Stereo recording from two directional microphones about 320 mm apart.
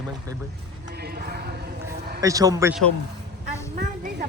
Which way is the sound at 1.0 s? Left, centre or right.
Right.